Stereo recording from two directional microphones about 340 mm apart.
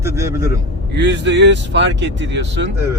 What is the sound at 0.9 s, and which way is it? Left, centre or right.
Speech, right.